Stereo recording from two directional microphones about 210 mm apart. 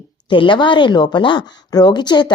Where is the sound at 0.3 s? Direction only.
25° left (ahead or behind).